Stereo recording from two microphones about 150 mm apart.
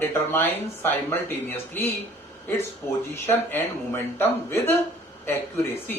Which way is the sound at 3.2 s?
15° left (ahead or behind).